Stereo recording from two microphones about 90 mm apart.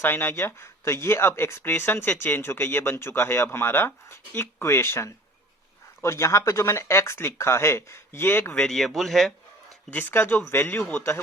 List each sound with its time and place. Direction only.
0.0 s speech: 25° left (ahead or behind)
8.5 s speech: 5° left (ahead or behind)
9.9 s speech: 20° left (ahead or behind)